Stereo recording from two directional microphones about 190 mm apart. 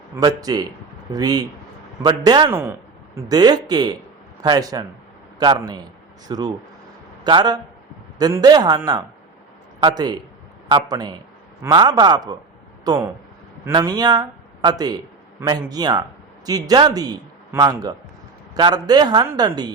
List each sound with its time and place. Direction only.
0.2 s a man's voice: 20° right (ahead or behind)